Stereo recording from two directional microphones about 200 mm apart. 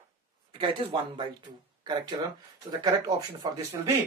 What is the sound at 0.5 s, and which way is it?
Speech, 25° right (ahead or behind).